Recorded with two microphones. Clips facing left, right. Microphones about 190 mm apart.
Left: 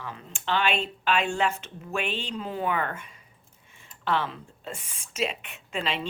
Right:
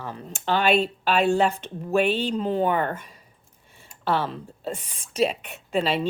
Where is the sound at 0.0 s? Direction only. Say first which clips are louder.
Right 4 dB; 40° right (ahead or behind).